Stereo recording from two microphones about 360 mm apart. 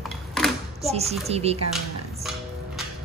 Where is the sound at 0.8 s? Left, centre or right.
Centre.